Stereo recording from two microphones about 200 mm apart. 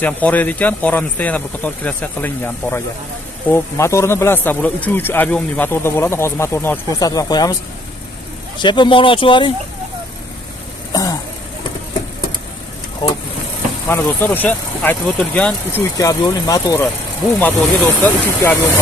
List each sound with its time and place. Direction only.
0.0 s speech: 10° left (ahead or behind)
8.5 s speech: 25° left (ahead or behind)
10.9 s vehicle: 15° left (ahead or behind)
13.8 s speech: 10° left (ahead or behind)
16.0 s speech: 15° left (ahead or behind)